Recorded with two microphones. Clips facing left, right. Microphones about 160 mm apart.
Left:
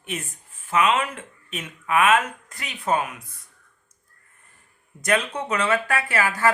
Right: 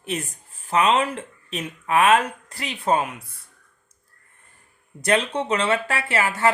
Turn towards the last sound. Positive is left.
turn(degrees=-25)  # may be behind; listen again after turning